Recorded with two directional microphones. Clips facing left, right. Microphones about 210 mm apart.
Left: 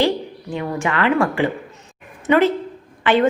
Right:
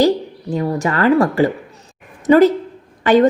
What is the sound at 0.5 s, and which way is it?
A woman's voice, 40° right (ahead or behind).